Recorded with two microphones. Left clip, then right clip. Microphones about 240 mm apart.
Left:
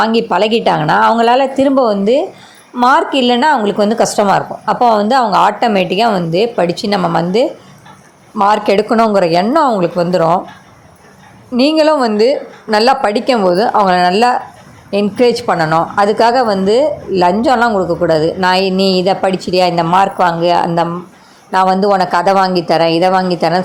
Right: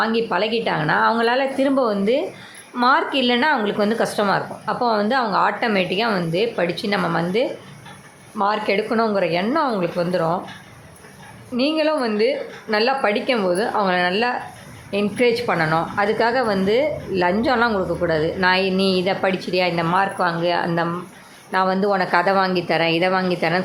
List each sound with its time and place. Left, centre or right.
0.0 s a woman's voice: left
8.4 s a woman's voice: left
11.5 s a woman's voice: left